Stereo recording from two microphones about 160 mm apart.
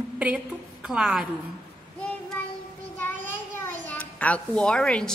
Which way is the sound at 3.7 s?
10° left (ahead or behind).